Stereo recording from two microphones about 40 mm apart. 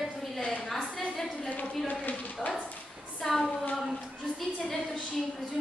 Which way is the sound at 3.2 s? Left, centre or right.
Centre.